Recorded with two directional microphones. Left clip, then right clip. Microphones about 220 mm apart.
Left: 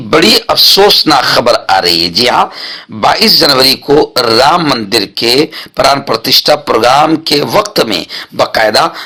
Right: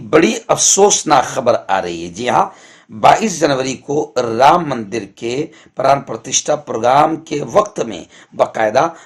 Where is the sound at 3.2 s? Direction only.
20° left (ahead or behind).